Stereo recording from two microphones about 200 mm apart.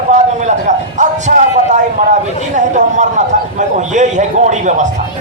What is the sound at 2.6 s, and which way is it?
A man's voice, 35° right (ahead or behind).